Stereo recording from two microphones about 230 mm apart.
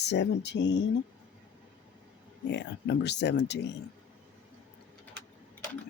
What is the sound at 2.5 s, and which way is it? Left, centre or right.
Speech, left.